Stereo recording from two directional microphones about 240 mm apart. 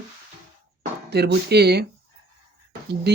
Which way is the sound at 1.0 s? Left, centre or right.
Right.